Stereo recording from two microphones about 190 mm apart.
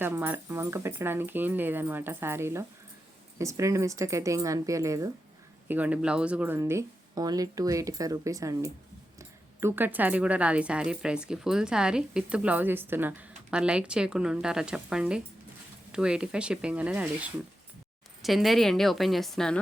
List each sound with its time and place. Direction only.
0.0 s a woman's voice: 10° right (ahead or behind)